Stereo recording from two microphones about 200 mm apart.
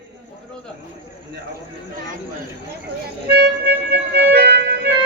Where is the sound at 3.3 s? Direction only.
55° right (ahead or behind).